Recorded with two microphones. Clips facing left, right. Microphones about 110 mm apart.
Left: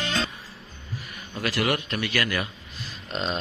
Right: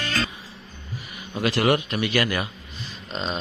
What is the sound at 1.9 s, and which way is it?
Speech, 20° right (ahead or behind).